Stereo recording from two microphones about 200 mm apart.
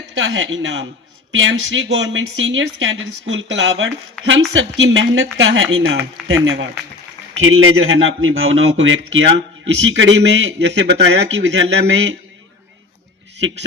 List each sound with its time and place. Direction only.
0.1 s speech: 75° right (ahead or behind)
7.4 s speech: 90° right; by 11.9 s 65° right (ahead or behind)